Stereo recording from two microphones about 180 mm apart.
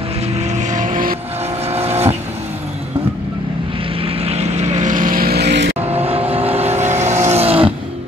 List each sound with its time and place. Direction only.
0.6 s vehicle: 45° right (ahead or behind)
4.0 s vehicle: 35° right (ahead or behind); by 5.8 s 75° right (ahead or behind)
5.8 s vehicle: 35° right (ahead or behind)